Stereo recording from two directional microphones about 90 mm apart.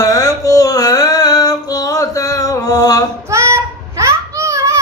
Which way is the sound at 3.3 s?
30° right (ahead or behind).